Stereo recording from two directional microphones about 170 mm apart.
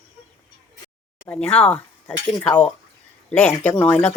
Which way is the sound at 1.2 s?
5° left (ahead or behind).